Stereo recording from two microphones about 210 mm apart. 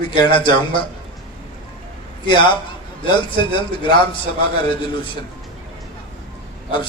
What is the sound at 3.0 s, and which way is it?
Speech, 25° left (ahead or behind).